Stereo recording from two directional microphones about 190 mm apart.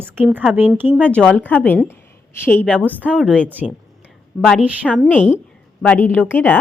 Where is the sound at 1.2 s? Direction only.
10° left (ahead or behind).